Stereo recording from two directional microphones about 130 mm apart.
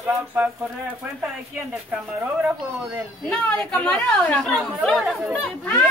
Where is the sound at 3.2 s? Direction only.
10° left (ahead or behind).